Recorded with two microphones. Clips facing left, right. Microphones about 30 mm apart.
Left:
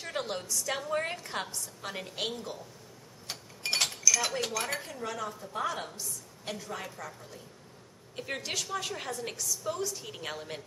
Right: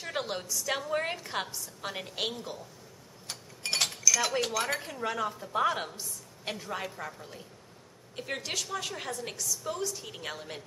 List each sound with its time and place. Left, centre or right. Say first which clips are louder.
0.1 s a woman's voice: right 1 dB; centre
3.3 s dishes: left 1 dB; centre
5.0 s speech: right 4 dB; right
8.2 s a woman's voice: even; centre